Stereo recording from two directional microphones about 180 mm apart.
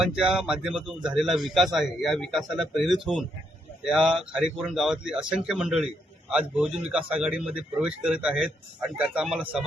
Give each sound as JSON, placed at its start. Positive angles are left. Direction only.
{"t": 0.0, "sound": "speech", "side_deg": -5}
{"t": 6.9, "sound": "speech", "side_deg": -5}